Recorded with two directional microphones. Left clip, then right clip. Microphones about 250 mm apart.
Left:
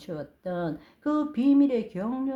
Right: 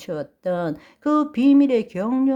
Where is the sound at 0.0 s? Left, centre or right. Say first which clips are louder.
Right 9 dB; right.